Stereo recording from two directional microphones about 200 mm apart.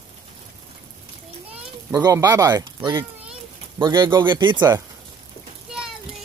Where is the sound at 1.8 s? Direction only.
15° right (ahead or behind).